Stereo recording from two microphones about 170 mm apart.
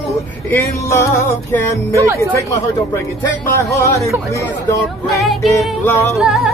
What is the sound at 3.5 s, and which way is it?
Music, 15° left (ahead or behind).